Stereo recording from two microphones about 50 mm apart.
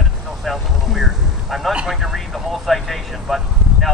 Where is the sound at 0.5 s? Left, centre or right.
Centre.